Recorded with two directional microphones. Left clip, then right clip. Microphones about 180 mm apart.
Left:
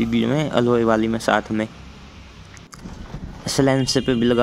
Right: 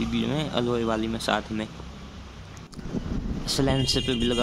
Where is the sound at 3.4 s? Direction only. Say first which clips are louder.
Left 6 dB; 25° left (ahead or behind).